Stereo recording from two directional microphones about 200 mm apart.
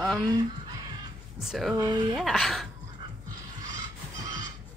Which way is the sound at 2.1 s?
Centre (ahead or behind).